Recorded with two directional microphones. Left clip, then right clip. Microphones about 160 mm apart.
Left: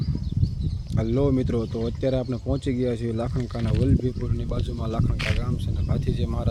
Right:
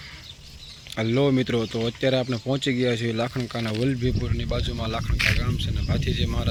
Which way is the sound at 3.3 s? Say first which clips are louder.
Right 2 dB; 5° right (ahead or behind).